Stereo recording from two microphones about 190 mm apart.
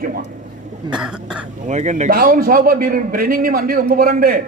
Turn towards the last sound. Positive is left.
turn(degrees=-50)  # may be behind; listen again after turning